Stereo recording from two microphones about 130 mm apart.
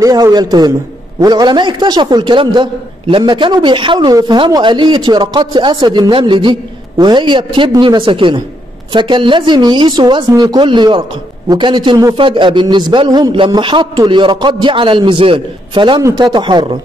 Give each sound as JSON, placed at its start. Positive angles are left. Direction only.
{"t": 0.0, "sound": "a man's voice", "side_deg": -30}